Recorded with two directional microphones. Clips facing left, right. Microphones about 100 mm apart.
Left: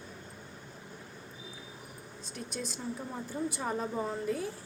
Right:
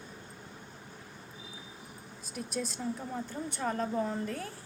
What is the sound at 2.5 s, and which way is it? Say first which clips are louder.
A woman's voice: right 3 dB; centre (ahead or behind).